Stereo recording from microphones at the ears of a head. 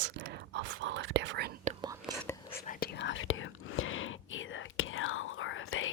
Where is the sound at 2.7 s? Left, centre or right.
Left.